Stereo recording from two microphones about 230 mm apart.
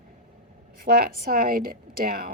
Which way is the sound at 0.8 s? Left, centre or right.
Right.